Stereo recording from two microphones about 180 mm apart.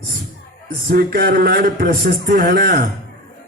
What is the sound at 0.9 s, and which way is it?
A man's voice, 55° right (ahead or behind).